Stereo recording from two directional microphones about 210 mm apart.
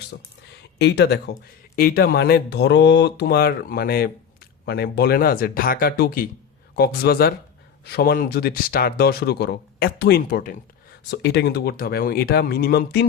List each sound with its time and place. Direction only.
0.8 s speech: 55° left (ahead or behind)
11.1 s speech: 55° left (ahead or behind)